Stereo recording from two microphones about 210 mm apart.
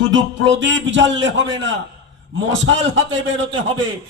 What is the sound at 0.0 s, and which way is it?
A man's voice, 60° right (ahead or behind).